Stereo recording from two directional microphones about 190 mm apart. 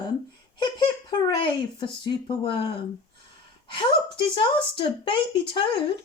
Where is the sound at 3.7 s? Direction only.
25° left (ahead or behind).